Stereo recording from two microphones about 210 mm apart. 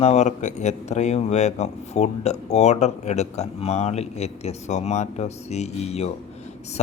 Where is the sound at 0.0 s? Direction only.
30° left (ahead or behind).